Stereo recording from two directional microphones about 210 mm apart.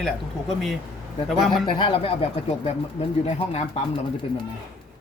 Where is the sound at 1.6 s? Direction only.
25° left (ahead or behind).